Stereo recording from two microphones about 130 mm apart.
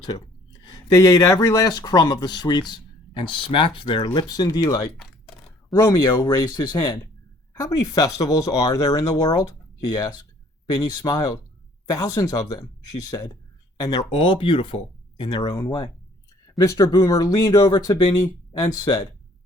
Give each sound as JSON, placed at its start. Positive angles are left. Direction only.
{"t": 0.0, "sound": "speech", "side_deg": 30}